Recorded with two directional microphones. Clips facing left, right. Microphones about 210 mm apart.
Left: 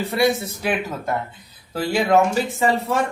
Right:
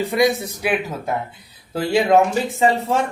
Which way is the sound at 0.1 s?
15° right (ahead or behind).